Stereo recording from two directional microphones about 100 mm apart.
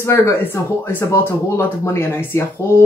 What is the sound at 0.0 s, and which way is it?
Speech, 25° left (ahead or behind).